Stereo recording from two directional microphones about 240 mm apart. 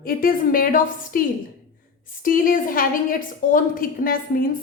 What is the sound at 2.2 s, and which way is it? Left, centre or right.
A woman's voice, left.